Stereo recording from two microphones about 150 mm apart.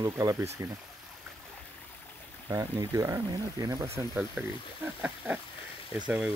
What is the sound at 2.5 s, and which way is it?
Speech, 25° right (ahead or behind).